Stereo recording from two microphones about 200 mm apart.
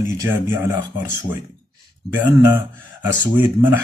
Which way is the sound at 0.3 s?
15° right (ahead or behind).